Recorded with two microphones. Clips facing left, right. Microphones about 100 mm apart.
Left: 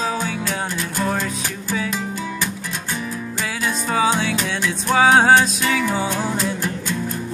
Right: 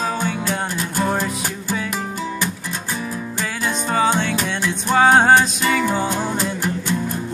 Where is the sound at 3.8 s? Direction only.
5° left (ahead or behind).